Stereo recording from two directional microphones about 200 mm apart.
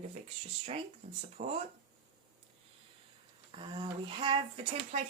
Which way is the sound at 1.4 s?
45° right (ahead or behind).